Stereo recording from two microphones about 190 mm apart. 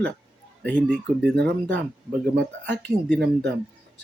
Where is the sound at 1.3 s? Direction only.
60° right (ahead or behind).